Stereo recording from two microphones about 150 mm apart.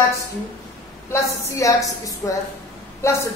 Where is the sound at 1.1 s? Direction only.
20° left (ahead or behind).